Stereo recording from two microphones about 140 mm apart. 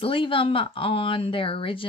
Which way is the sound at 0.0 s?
40° left (ahead or behind).